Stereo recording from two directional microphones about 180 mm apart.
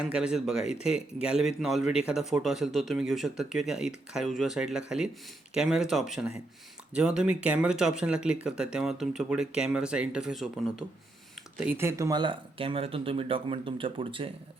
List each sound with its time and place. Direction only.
0.0 s speech: 5° right (ahead or behind); by 14.3 s 30° right (ahead or behind)